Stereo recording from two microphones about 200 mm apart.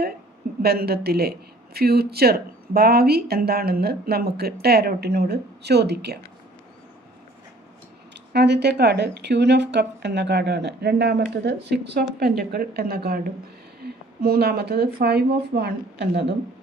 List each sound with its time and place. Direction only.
0.6 s speech: 50° right (ahead or behind)
8.1 s speech: 55° right (ahead or behind)